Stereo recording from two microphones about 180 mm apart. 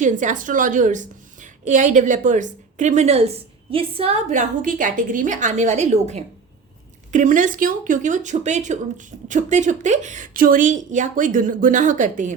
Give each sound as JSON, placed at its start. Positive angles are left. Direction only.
{"t": 0.0, "sound": "a woman's voice", "side_deg": -45}